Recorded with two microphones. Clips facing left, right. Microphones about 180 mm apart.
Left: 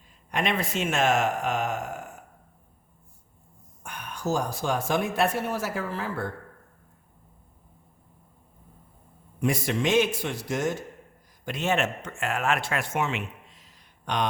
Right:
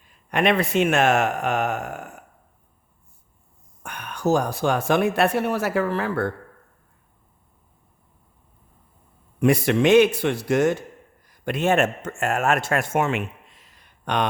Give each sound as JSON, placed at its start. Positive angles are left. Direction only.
{"t": 0.3, "sound": "speech", "side_deg": -65}
{"t": 3.8, "sound": "speech", "side_deg": -65}
{"t": 9.4, "sound": "a man's voice", "side_deg": -65}